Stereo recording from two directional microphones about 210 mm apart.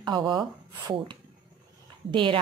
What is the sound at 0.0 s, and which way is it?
Speech, 20° right (ahead or behind).